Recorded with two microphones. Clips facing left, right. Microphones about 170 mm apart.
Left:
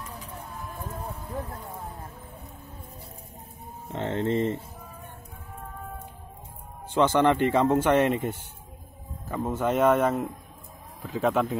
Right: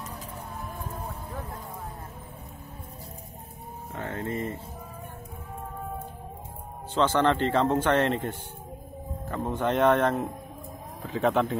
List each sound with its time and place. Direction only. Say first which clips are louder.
3.9 s speech: left 6 dB; 25° left (ahead or behind)
6.9 s a man's voice: left 2 dB; 15° left (ahead or behind)